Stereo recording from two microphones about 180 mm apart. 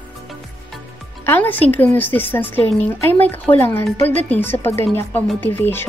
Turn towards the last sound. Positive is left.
turn(degrees=10)  # may be behind; listen again after turning